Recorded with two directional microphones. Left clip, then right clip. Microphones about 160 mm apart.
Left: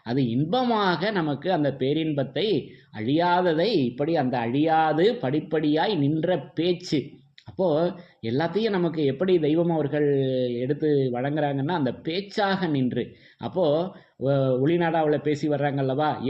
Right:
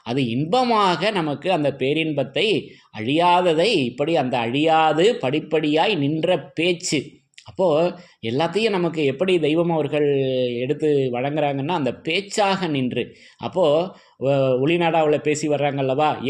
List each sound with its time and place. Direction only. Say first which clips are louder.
0.0 s a man's voice: right 3 dB; 20° right (ahead or behind)